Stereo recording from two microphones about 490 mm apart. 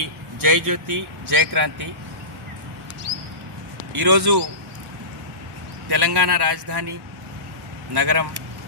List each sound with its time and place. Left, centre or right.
0.0 s speech: right
4.0 s speech: right
5.9 s speech: right
7.9 s speech: right